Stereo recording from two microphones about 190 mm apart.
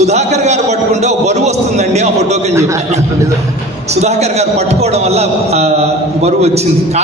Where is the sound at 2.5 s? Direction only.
15° right (ahead or behind).